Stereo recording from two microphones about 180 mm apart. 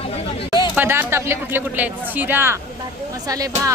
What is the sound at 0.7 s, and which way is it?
Speech, 10° right (ahead or behind).